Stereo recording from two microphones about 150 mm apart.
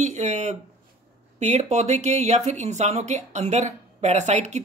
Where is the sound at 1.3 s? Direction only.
50° right (ahead or behind).